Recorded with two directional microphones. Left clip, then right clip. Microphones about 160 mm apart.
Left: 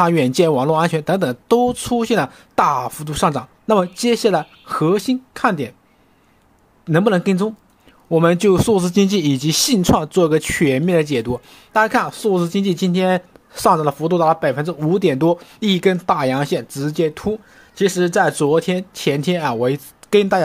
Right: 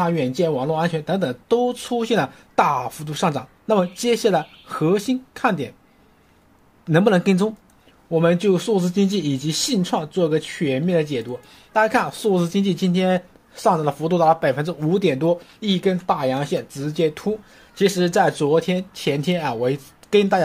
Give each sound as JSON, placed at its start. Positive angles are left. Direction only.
{"t": 0.0, "sound": "speech", "side_deg": 50}
{"t": 6.9, "sound": "speech", "side_deg": 10}
{"t": 8.1, "sound": "speech", "side_deg": 35}
{"t": 11.8, "sound": "speech", "side_deg": 20}
{"t": 15.1, "sound": "speech", "side_deg": 45}